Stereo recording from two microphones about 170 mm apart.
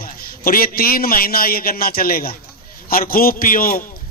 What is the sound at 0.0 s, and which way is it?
A man's voice, 60° left (ahead or behind).